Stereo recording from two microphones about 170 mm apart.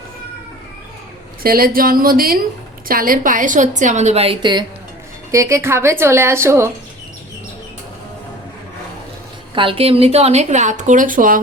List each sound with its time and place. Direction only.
1.4 s a woman's voice: 60° right (ahead or behind); by 4.6 s 30° right (ahead or behind)
5.3 s a woman's voice: 15° right (ahead or behind)
9.6 s a woman's voice: 30° right (ahead or behind); by 11.3 s 55° right (ahead or behind)